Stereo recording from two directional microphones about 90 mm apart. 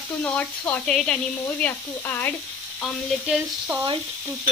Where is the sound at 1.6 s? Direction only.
20° left (ahead or behind).